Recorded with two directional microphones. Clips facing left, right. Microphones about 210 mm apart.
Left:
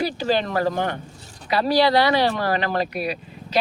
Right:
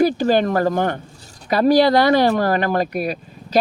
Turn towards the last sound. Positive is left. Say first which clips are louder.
# right 3 dB
turn(degrees=-45)  # may be behind; listen again after turning